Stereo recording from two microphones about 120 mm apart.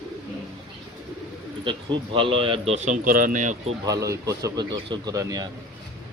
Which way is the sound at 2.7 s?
75° right (ahead or behind).